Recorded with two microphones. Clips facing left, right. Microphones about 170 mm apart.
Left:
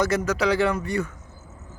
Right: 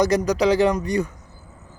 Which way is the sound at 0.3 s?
15° right (ahead or behind).